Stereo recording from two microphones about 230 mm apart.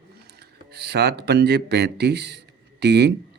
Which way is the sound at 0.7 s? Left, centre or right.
Right.